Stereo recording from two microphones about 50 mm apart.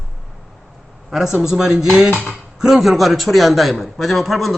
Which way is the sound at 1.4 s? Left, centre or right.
Centre.